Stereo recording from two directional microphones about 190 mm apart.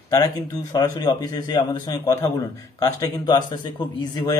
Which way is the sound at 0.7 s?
20° left (ahead or behind).